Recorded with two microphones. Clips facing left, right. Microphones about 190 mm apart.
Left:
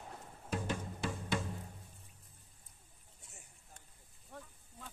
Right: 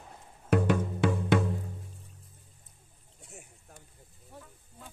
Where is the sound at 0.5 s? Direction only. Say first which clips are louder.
Right 13 dB; 65° right (ahead or behind).